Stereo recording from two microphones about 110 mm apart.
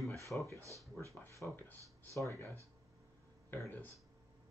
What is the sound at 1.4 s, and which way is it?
Speech, 15° left (ahead or behind).